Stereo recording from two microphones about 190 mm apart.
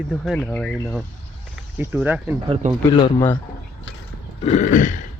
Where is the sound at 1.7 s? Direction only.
10° right (ahead or behind).